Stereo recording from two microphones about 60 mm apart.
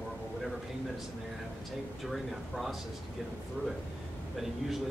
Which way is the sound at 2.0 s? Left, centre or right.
Centre.